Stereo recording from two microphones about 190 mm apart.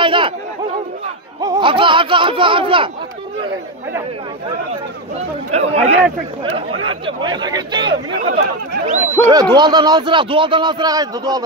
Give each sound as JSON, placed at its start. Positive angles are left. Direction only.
{"t": 0.0, "sound": "a sound", "side_deg": -25}
{"t": 1.4, "sound": "speech", "side_deg": -20}
{"t": 5.1, "sound": "a sound", "side_deg": -35}
{"t": 7.1, "sound": "speech", "side_deg": -25}
{"t": 8.3, "sound": "speech", "side_deg": -60}
{"t": 8.8, "sound": "speech", "side_deg": -40}
{"t": 9.3, "sound": "speech", "side_deg": -20}